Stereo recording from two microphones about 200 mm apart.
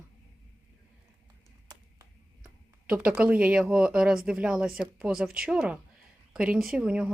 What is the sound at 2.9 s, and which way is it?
Speech, 5° right (ahead or behind).